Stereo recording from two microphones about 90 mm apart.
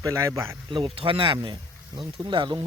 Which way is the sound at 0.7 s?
80° right.